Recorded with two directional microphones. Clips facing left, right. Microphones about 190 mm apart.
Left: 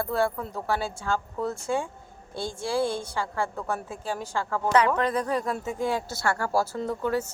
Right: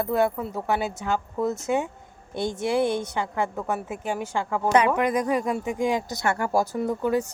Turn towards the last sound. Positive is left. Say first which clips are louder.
# right 3 dB
turn(degrees=-15)  # may be behind; listen again after turning